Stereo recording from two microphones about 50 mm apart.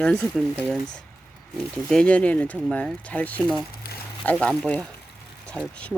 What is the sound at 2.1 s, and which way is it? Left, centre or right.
Speech, left.